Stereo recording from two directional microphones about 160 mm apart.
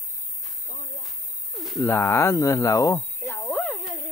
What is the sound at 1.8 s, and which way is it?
Speech, 15° left (ahead or behind).